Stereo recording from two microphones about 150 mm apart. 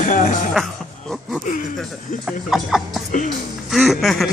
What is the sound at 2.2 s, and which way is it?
Speech, 5° right (ahead or behind).